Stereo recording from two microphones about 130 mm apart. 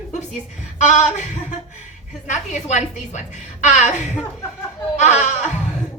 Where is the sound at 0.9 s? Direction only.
65° left (ahead or behind).